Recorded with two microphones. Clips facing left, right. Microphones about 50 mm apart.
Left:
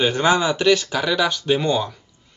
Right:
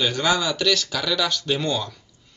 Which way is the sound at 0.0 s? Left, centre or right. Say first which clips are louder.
Left 4 dB; left.